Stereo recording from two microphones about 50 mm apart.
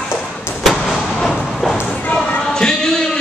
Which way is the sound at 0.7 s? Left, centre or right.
Centre.